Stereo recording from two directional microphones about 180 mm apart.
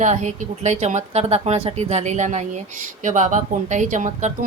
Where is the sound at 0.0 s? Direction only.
40° right (ahead or behind).